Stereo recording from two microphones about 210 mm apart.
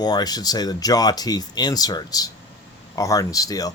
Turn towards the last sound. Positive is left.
turn(degrees=15)  # may be behind; listen again after turning